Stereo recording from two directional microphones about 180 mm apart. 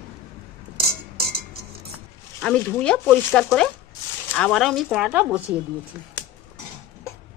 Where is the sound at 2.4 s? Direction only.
5° left (ahead or behind).